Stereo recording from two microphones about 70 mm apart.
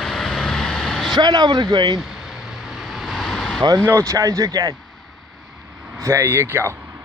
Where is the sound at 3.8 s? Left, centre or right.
Right.